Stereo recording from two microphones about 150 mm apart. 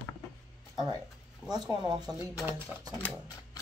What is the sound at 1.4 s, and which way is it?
Speech, 30° right (ahead or behind).